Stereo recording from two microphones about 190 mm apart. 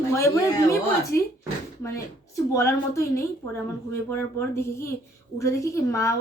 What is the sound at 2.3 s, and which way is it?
Speech, 15° left (ahead or behind).